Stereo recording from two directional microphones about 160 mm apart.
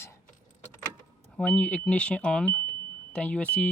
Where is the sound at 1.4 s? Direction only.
10° left (ahead or behind).